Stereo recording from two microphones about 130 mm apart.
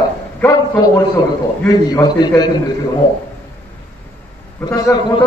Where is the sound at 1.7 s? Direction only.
30° left (ahead or behind).